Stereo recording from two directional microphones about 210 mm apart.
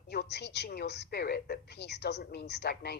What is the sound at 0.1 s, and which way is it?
A woman's voice, 50° left (ahead or behind).